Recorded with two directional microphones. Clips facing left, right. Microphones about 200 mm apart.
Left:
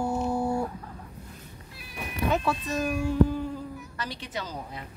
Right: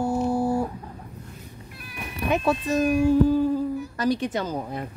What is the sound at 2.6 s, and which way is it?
Speech, 25° right (ahead or behind).